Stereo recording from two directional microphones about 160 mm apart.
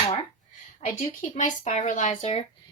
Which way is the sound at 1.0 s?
50° left (ahead or behind).